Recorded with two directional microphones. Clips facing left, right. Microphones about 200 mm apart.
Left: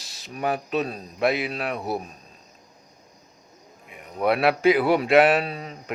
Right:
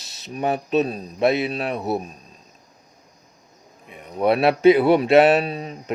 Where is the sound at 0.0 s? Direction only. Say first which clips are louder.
Right 3 dB; 20° right (ahead or behind).